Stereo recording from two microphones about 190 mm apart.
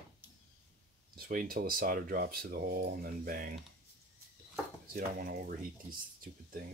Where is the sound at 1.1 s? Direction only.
50° right (ahead or behind).